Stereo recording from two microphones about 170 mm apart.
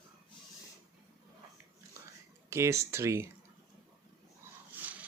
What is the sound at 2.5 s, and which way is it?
Speech, 15° right (ahead or behind).